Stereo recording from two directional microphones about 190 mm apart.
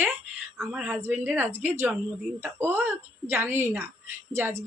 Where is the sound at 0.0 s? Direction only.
10° right (ahead or behind).